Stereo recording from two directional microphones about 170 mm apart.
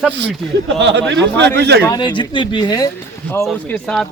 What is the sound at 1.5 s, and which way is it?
Speech, 75° right (ahead or behind).